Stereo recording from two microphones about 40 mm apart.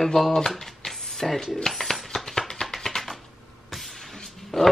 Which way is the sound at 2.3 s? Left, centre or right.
Centre.